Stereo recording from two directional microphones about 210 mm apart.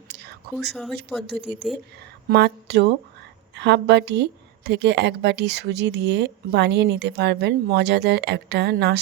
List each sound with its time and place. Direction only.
0.1 s whispering: 50° right (ahead or behind)
0.5 s speech: centre (ahead or behind)
2.3 s a woman's voice: 50° right (ahead or behind)